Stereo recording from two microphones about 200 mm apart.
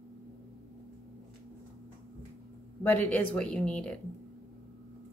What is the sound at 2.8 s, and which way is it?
Speech, 5° left (ahead or behind).